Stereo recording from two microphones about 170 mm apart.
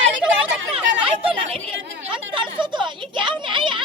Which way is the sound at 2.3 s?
30° right (ahead or behind).